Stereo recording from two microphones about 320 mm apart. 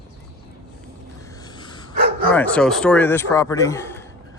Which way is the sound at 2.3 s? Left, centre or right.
Centre.